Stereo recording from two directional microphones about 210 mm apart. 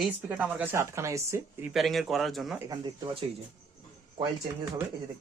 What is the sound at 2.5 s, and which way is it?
Speech, 20° right (ahead or behind).